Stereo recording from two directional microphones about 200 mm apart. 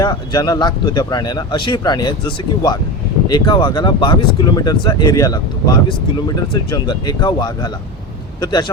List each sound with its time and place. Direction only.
0.0 s speech: 20° left (ahead or behind)